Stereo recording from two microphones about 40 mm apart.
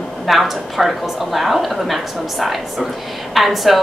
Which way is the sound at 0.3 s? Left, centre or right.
Centre.